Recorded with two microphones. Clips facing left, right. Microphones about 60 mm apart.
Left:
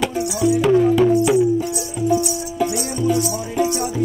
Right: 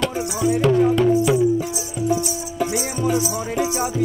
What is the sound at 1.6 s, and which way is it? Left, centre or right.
Speech, left.